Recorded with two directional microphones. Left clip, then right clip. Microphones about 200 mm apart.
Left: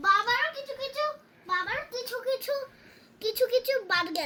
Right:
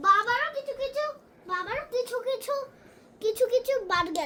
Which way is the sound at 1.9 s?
Centre (ahead or behind).